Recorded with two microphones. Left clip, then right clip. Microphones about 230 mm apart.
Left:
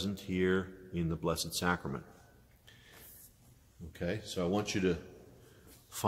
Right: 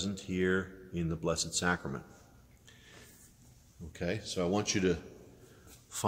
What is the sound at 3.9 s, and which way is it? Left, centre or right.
Speech, centre.